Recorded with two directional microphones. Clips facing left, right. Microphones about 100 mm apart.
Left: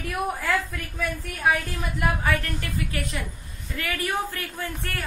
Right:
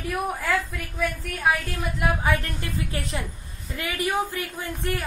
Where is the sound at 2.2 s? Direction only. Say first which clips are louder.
Right 1 dB; 25° right (ahead or behind).